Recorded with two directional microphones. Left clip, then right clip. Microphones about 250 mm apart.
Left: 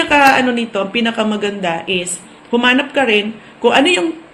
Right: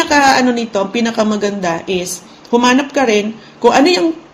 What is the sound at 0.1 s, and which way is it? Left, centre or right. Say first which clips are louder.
A woman's voice: left 1 dB; right.